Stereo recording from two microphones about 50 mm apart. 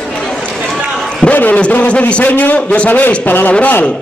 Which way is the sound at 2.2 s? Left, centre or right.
Left.